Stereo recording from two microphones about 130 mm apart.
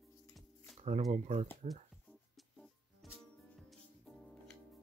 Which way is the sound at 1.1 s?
60° right (ahead or behind).